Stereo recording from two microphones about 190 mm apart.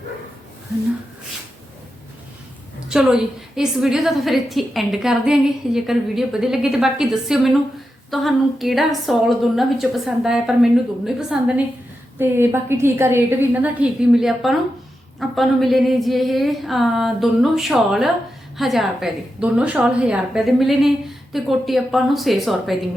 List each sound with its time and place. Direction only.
2.9 s a woman's voice: 5° right (ahead or behind)